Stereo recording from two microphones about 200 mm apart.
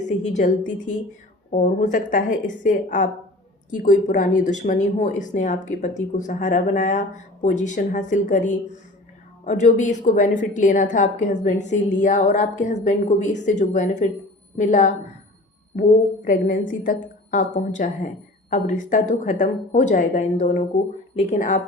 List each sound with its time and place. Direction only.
0.0 s a woman's voice: 35° left (ahead or behind)
16.2 s a woman's voice: 40° left (ahead or behind)